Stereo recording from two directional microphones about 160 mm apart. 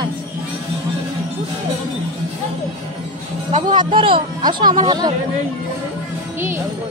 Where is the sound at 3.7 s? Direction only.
30° right (ahead or behind).